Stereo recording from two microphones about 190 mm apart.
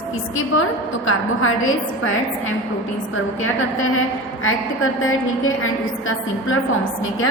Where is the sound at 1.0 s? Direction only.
90° left.